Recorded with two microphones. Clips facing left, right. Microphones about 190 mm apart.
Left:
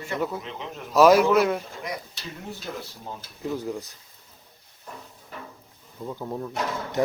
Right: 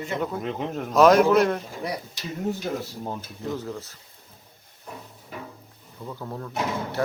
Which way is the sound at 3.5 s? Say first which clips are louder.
Left 4 dB; 15° left (ahead or behind).